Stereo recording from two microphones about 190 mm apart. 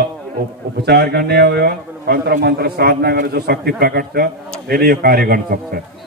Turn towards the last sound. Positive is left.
turn(degrees=-50)  # may be behind; listen again after turning